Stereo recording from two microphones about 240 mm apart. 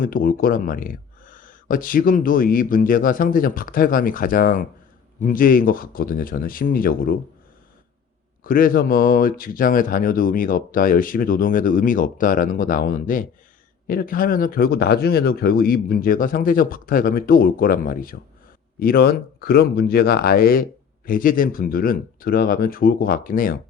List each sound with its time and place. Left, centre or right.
0.0 s speech: left
8.4 s speech: left